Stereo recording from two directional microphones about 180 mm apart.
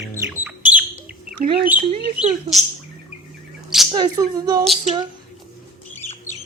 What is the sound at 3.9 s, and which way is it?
Speech, 20° right (ahead or behind).